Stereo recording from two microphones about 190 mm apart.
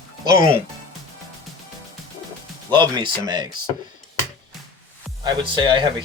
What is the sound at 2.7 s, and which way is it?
Speech, 25° right (ahead or behind).